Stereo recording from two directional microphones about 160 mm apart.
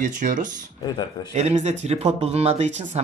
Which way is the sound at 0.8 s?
25° left (ahead or behind).